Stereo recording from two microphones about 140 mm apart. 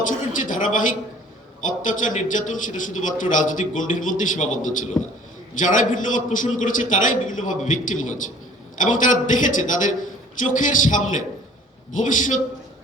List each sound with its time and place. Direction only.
0.1 s a man's voice: 65° left (ahead or behind)